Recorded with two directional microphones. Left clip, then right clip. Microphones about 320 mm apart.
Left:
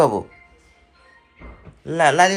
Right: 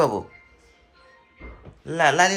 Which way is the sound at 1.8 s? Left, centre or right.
Centre.